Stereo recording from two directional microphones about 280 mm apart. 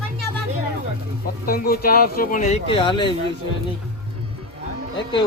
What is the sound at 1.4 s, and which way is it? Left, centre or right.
Speech, left.